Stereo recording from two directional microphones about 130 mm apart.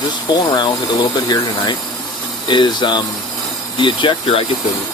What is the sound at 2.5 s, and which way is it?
Speech, 35° left (ahead or behind).